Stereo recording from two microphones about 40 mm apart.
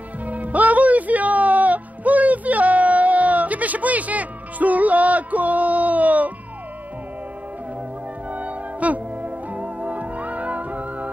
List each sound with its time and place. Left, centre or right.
0.2 s music: right
8.3 s music: right